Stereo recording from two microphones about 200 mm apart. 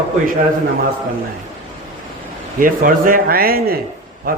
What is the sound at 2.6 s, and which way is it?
A man's voice, 45° right (ahead or behind).